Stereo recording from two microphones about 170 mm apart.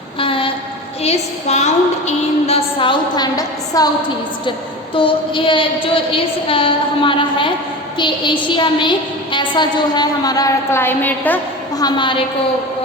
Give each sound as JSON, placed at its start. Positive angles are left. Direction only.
{"t": 0.2, "sound": "train", "side_deg": 30}
{"t": 1.0, "sound": "a woman's voice", "side_deg": 40}
{"t": 4.9, "sound": "a woman's voice", "side_deg": 30}
{"t": 11.8, "sound": "a woman's voice", "side_deg": 25}